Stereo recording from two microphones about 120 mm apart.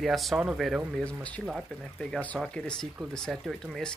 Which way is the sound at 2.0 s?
10° left (ahead or behind).